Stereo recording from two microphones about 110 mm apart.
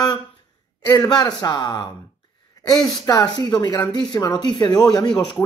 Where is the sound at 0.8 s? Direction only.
35° left (ahead or behind).